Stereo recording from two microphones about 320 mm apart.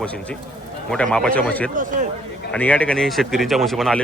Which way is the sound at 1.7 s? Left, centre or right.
Right.